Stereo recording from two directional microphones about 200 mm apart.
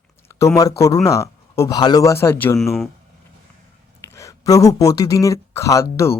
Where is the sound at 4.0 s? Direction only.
15° left (ahead or behind).